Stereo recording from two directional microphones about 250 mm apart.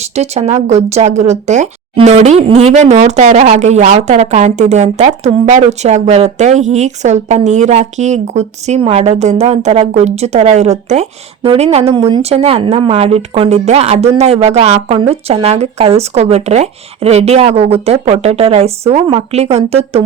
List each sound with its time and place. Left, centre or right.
0.2 s speech: right